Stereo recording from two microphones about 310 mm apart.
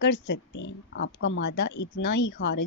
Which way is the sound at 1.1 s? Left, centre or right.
Left.